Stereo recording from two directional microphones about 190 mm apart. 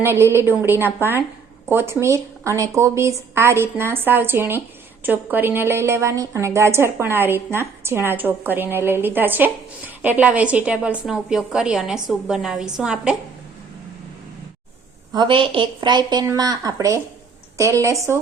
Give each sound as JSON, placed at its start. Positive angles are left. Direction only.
{"t": 0.0, "sound": "a woman's voice", "side_deg": -10}
{"t": 15.1, "sound": "a woman's voice", "side_deg": -25}